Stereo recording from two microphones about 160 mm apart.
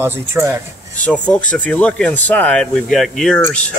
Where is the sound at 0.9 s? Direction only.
10° left (ahead or behind).